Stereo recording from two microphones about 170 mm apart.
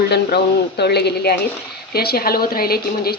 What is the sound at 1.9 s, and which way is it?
Speech, 65° left (ahead or behind).